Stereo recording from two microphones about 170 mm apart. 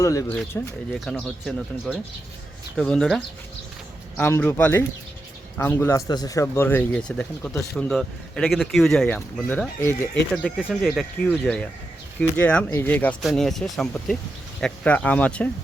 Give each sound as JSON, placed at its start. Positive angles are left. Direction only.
{"t": 0.0, "sound": "speech", "side_deg": 20}